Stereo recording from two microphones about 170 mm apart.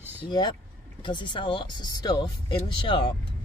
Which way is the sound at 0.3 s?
25° left (ahead or behind).